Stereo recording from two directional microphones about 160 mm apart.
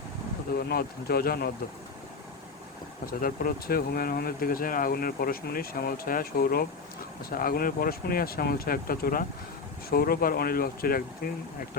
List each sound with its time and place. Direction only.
0.7 s speech: 75° left (ahead or behind)
3.1 s speech: 65° left (ahead or behind)